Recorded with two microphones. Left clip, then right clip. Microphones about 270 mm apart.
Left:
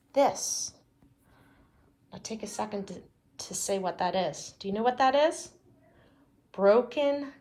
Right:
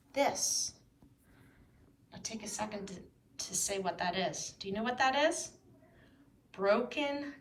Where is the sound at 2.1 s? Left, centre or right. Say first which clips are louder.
Left 5 dB; centre.